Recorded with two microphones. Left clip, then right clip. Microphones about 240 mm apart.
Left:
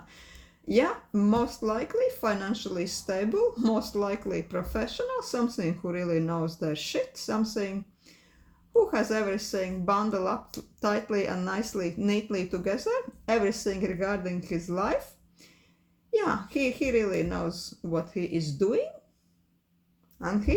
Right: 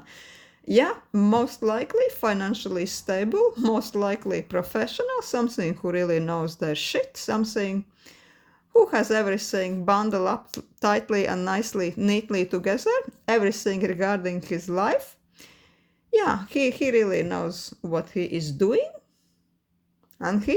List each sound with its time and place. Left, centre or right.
0.1 s speech: right
16.1 s speech: right
20.1 s speech: right